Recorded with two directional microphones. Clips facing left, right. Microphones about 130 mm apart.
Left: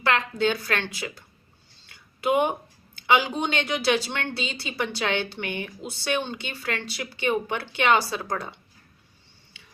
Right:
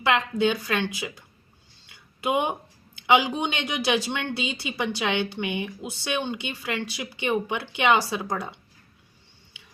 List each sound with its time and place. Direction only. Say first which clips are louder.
0.0 s speech: right 1 dB; 15° right (ahead or behind)